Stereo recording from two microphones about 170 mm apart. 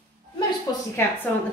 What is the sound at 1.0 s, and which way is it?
Speech, 15° left (ahead or behind).